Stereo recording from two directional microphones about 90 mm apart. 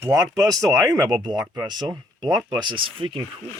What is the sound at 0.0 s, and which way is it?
Speech, 40° right (ahead or behind).